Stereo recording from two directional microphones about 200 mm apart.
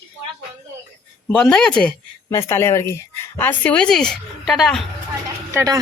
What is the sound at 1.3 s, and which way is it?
A woman's voice, 5° left (ahead or behind).